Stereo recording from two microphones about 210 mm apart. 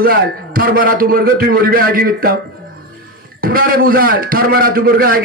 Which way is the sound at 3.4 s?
45° right (ahead or behind).